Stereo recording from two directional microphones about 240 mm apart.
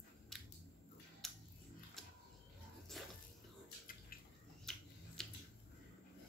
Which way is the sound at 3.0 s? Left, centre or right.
Centre.